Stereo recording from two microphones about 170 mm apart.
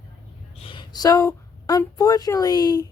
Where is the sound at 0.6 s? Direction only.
30° left (ahead or behind).